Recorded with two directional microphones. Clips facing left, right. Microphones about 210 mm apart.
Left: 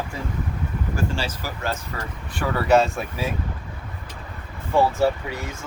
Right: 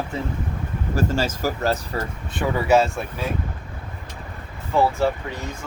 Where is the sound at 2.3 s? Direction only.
20° right (ahead or behind).